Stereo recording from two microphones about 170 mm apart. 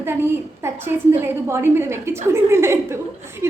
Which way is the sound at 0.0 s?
15° right (ahead or behind).